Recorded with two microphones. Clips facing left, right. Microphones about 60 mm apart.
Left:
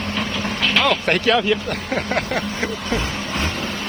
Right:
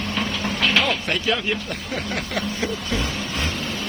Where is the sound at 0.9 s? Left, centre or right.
Left.